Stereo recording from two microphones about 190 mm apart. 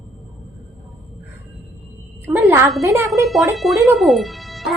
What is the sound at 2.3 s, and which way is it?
Speech, 15° right (ahead or behind).